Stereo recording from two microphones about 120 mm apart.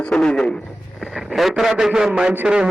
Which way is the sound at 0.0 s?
5° left (ahead or behind).